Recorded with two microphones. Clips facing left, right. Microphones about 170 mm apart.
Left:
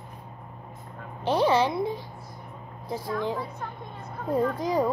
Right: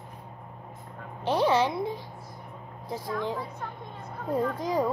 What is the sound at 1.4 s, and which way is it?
Speech, centre (ahead or behind).